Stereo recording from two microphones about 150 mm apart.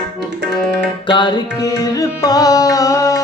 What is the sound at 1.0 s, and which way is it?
Music, 30° left (ahead or behind).